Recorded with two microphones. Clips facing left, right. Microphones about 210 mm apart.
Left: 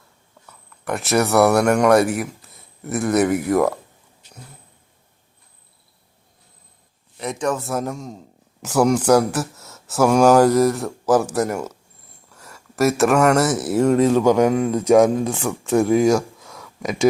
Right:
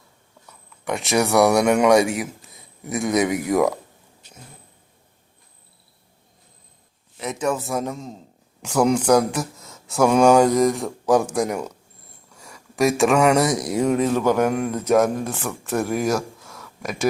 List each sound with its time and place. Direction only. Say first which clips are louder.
0.9 s a man's voice: left 1 dB; centre (ahead or behind)
7.2 s a man's voice: left 1 dB; 5° right (ahead or behind)
12.3 s a sound: left 1 dB; 5° left (ahead or behind)
13.0 s a man's voice: left 1 dB; 5° right (ahead or behind)
14.7 s speech: left 4 dB; 10° left (ahead or behind)
15.8 s speech: left 6 dB; centre (ahead or behind)